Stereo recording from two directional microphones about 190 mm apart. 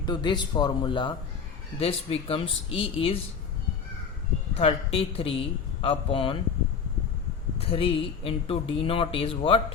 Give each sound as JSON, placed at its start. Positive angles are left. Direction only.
{"t": 0.0, "sound": "speech", "side_deg": 25}
{"t": 4.5, "sound": "speech", "side_deg": 30}
{"t": 7.6, "sound": "speech", "side_deg": 30}